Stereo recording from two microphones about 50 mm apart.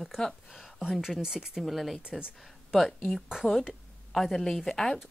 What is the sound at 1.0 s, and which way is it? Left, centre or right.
Speech, centre.